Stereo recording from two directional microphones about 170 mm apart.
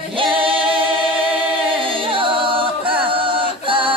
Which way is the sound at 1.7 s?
30° right (ahead or behind).